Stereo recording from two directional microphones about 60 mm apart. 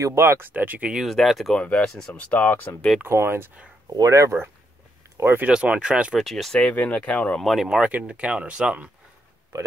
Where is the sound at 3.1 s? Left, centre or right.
Right.